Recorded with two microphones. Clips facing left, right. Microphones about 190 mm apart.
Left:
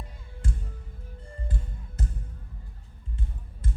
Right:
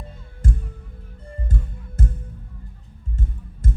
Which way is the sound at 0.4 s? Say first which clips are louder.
Right 8 dB; 40° right (ahead or behind).